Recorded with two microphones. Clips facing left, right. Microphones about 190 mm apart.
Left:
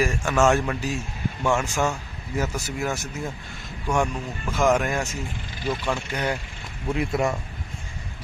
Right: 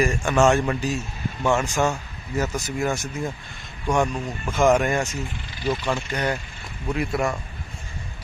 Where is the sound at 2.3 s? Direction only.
10° left (ahead or behind).